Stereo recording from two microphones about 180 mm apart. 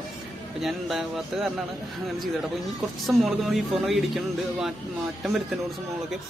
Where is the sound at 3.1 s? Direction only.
Centre (ahead or behind).